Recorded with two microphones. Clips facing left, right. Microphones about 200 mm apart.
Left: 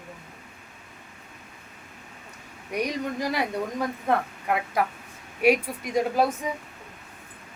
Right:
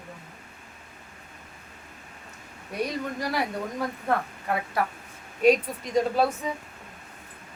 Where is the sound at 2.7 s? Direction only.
15° left (ahead or behind).